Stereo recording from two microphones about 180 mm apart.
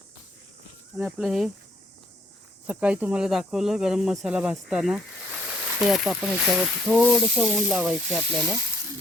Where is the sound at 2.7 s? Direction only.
10° right (ahead or behind).